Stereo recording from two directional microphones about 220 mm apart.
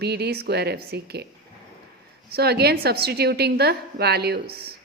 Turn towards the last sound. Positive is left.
turn(degrees=-45)  # may be behind; listen again after turning